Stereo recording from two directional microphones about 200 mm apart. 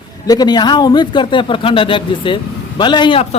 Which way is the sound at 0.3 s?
20° left (ahead or behind).